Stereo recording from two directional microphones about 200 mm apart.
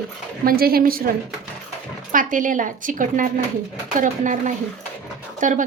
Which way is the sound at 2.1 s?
40° right (ahead or behind).